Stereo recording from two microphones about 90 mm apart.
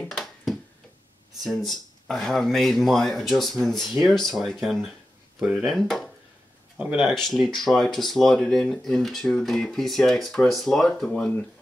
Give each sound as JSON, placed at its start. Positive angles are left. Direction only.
{"t": 0.1, "sound": "finger snapping", "side_deg": 0}
{"t": 1.4, "sound": "speech", "side_deg": 0}
{"t": 5.4, "sound": "speech", "side_deg": -15}
{"t": 5.7, "sound": "speech", "side_deg": 0}
{"t": 11.1, "sound": "speech", "side_deg": 15}